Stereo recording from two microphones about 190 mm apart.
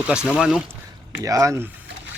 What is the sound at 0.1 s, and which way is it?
Speech, 5° right (ahead or behind).